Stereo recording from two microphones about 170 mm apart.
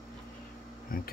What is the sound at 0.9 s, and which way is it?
Speech, 55° left (ahead or behind).